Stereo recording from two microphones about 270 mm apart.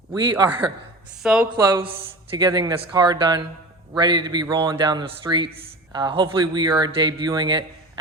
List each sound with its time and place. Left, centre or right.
0.1 s speech: centre
1.2 s a woman's voice: centre
1.5 s speech: centre